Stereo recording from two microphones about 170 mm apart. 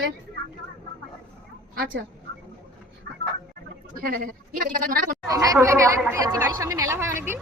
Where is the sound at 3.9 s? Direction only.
55° right (ahead or behind).